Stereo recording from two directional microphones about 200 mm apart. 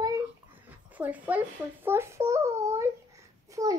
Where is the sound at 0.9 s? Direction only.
10° right (ahead or behind).